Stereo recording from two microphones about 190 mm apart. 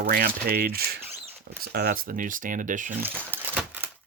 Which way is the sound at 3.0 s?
10° right (ahead or behind).